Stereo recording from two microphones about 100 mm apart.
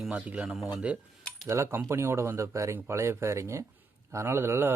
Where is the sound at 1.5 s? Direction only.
30° right (ahead or behind).